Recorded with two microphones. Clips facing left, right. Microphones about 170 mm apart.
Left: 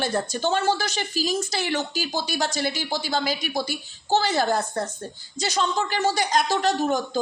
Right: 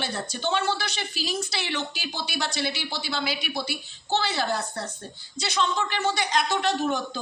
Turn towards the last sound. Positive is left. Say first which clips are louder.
# left 4 dB
turn(degrees=45)  # may be behind; listen again after turning